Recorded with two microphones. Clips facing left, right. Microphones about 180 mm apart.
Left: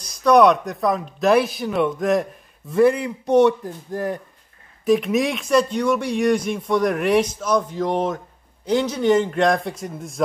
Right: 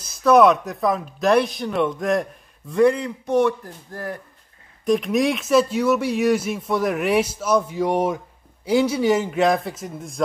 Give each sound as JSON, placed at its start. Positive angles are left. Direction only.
{"t": 0.0, "sound": "speech", "side_deg": -5}
{"t": 3.3, "sound": "speech", "side_deg": 20}
{"t": 4.8, "sound": "speech", "side_deg": 0}